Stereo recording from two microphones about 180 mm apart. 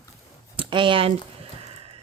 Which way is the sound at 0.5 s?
25° right (ahead or behind).